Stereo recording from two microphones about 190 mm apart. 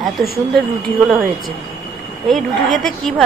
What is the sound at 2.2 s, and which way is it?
A woman's voice, centre (ahead or behind).